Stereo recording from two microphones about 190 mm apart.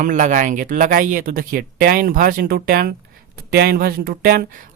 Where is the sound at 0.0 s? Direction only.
40° right (ahead or behind).